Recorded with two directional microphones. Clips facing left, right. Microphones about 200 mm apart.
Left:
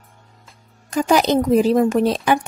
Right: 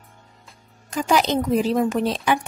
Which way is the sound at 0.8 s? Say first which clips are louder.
Left 4 dB; 45° left (ahead or behind).